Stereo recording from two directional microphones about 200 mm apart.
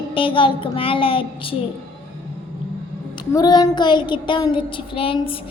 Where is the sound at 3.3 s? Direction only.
20° left (ahead or behind).